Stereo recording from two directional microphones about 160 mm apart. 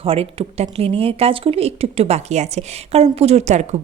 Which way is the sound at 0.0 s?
35° right (ahead or behind).